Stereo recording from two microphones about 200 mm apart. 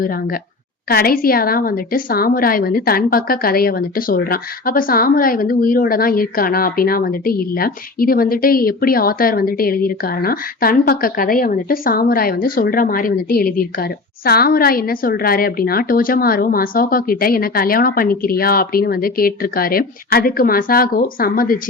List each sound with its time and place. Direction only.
0.0 s a woman's voice: 45° left (ahead or behind)